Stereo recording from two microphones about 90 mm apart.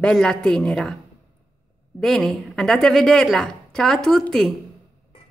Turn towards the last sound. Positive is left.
turn(degrees=5)  # may be behind; listen again after turning